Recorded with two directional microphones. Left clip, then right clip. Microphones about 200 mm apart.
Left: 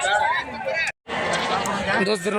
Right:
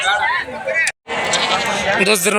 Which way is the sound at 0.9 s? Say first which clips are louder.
Right 5 dB; 55° left (ahead or behind).